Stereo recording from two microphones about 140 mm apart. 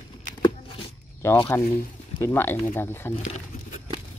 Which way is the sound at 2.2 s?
20° left (ahead or behind).